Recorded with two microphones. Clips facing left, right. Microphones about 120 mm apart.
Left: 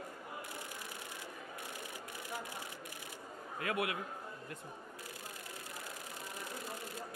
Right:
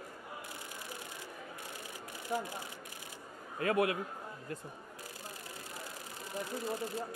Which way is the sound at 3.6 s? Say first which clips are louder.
Right 6 dB; 35° right (ahead or behind).